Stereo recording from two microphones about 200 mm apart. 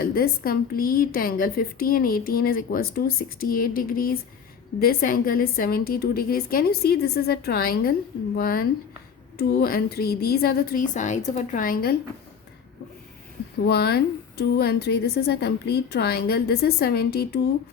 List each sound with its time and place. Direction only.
0.0 s a woman's voice: 50° left (ahead or behind)
13.7 s a woman's voice: 50° left (ahead or behind)